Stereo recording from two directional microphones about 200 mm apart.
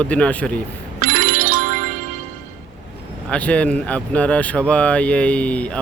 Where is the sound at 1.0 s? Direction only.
40° right (ahead or behind).